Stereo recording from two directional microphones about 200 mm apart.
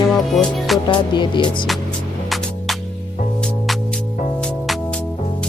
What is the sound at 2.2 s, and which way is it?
Music, centre (ahead or behind).